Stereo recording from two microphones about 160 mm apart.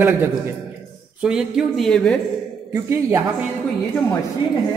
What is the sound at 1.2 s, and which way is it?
Speech, 5° right (ahead or behind).